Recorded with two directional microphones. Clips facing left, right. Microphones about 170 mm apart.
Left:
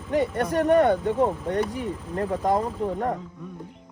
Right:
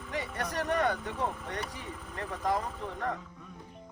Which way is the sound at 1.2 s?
50° left (ahead or behind).